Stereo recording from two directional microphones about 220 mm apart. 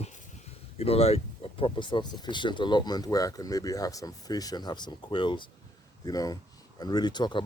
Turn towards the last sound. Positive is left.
turn(degrees=20)  # may be behind; listen again after turning